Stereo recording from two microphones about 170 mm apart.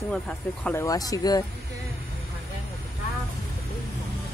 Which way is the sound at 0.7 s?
15° left (ahead or behind).